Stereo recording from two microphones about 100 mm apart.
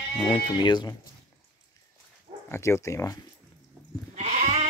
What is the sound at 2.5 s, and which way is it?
Speech, 25° left (ahead or behind).